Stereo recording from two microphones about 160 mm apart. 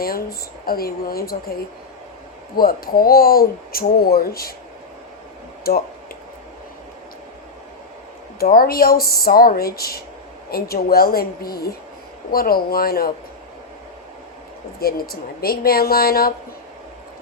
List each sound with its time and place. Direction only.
0.0 s speech: 70° left (ahead or behind)
2.6 s speech: 65° left (ahead or behind)
5.7 s speech: 70° left (ahead or behind)
8.4 s speech: 70° left (ahead or behind)
14.8 s speech: 70° left (ahead or behind)